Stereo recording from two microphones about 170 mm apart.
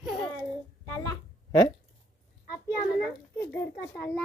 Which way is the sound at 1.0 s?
25° left (ahead or behind).